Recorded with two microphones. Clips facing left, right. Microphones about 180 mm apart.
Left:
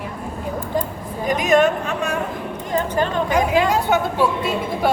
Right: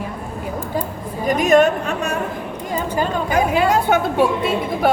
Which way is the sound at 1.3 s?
50° right (ahead or behind).